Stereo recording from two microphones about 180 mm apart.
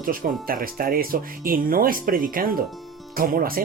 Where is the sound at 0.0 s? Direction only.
50° right (ahead or behind).